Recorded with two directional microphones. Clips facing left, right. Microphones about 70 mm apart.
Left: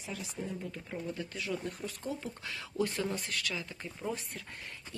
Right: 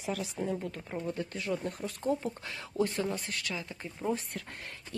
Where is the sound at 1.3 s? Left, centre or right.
Right.